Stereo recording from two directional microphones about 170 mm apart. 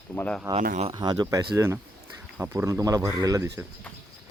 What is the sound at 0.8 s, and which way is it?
Speech, 25° right (ahead or behind).